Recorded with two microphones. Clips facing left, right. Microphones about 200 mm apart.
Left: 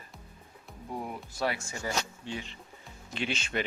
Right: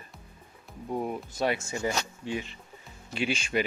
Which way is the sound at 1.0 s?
20° right (ahead or behind).